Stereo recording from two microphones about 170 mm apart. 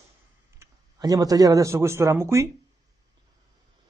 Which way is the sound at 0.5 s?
20° right (ahead or behind).